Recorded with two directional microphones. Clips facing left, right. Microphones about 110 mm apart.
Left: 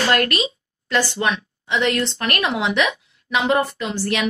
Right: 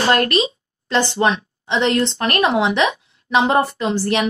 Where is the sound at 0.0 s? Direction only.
30° right (ahead or behind).